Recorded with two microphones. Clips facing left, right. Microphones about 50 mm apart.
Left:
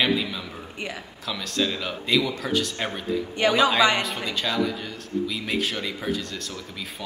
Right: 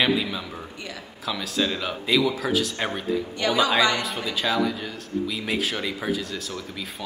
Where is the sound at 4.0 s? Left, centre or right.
Centre.